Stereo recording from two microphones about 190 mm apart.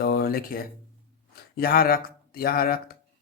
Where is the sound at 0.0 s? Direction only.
55° left (ahead or behind).